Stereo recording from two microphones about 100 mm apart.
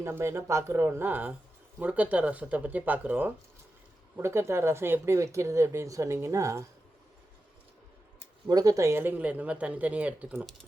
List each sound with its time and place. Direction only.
0.0 s speech: 25° right (ahead or behind)
8.4 s speech: 35° right (ahead or behind); by 10.4 s 15° right (ahead or behind)